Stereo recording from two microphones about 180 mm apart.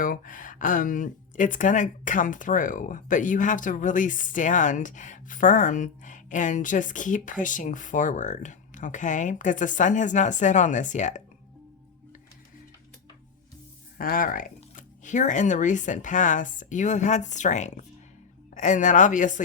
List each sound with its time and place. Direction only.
0.0 s speech: 50° left (ahead or behind)
14.0 s speech: 50° left (ahead or behind)